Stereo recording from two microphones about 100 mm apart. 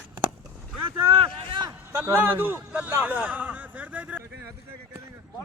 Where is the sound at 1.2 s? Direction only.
55° right (ahead or behind).